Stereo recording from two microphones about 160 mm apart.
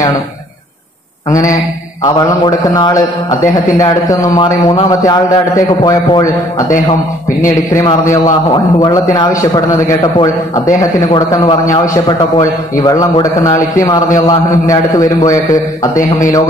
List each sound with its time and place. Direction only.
2.0 s a man's voice: 25° left (ahead or behind)
8.8 s a man's voice: 25° left (ahead or behind)